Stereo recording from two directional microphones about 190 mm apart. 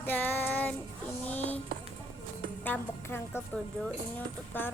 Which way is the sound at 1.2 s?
10° left (ahead or behind).